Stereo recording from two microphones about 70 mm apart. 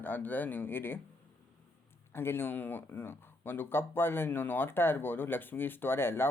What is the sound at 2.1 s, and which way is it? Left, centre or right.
Speech, left.